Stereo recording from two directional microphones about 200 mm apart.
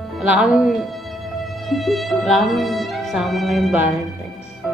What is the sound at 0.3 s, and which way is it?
Speech, 5° right (ahead or behind).